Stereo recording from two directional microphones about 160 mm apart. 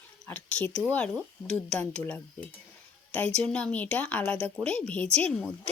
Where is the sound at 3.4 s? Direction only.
5° left (ahead or behind).